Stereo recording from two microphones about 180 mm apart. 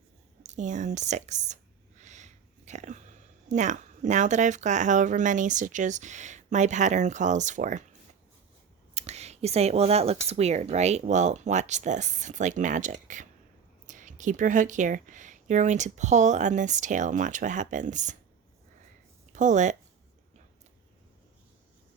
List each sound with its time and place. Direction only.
0.4 s speech: 40° right (ahead or behind)
9.0 s speech: 35° right (ahead or behind)
19.3 s speech: 45° right (ahead or behind)